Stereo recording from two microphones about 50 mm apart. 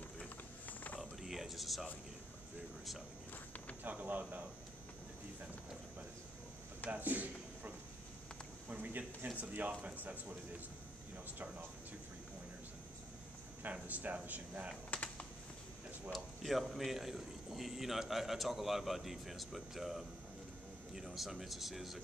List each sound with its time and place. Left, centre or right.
1.2 s a sound: centre
3.8 s speech: right
6.9 s a man's voice: right
11.3 s speech: right
13.6 s speech: right
14.9 s typing: left
16.1 s a man's voice: centre